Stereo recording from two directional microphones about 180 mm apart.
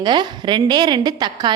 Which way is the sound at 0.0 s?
25° right (ahead or behind).